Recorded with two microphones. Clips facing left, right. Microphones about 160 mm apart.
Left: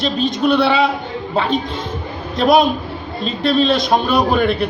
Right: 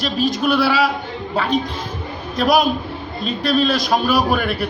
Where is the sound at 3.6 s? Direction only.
Centre (ahead or behind).